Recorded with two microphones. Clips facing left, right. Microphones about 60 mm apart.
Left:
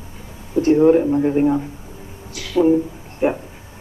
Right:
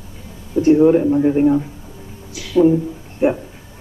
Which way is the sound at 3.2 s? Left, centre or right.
Centre.